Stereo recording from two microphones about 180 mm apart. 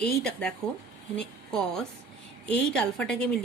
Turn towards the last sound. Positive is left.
turn(degrees=5)  # may be behind; listen again after turning